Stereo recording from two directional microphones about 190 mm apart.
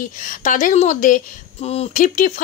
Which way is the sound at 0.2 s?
45° left (ahead or behind).